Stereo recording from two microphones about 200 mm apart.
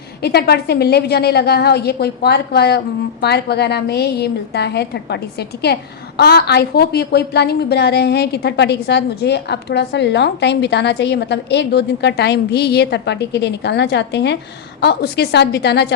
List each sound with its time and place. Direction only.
0.2 s a woman's voice: 55° left (ahead or behind)